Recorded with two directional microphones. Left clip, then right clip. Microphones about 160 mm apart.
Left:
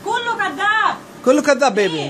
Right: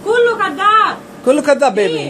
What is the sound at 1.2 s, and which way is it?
Speech, 30° left (ahead or behind).